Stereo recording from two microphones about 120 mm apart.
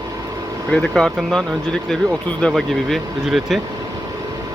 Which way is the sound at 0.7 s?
5° left (ahead or behind).